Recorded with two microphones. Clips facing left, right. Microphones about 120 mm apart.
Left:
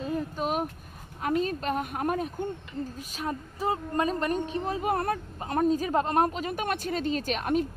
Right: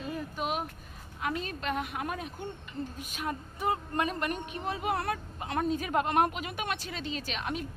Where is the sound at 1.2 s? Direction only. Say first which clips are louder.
Left 6 dB; 40° left (ahead or behind).